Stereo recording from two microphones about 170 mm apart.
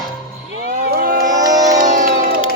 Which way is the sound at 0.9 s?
60° right (ahead or behind).